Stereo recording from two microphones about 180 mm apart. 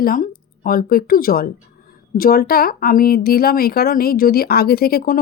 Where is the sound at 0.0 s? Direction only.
50° left (ahead or behind).